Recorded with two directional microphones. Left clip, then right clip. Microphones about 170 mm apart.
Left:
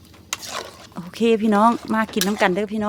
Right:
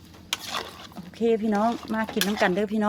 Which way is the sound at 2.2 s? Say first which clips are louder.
Even; 45° left (ahead or behind).